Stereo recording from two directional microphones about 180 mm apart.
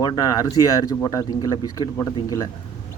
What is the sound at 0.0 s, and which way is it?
Speech, 20° left (ahead or behind).